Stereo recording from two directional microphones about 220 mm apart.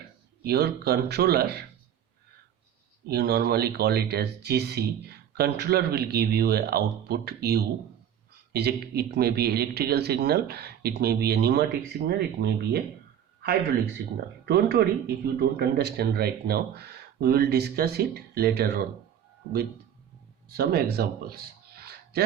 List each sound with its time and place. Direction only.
0.4 s speech: 45° right (ahead or behind)
3.1 s speech: 45° right (ahead or behind)
14.4 s speech: 45° right (ahead or behind)
20.5 s speech: 45° right (ahead or behind)